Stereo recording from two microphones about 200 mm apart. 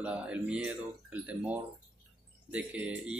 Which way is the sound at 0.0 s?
5° right (ahead or behind).